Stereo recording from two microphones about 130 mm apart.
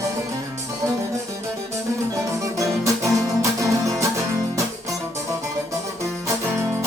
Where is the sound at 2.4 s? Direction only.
25° right (ahead or behind).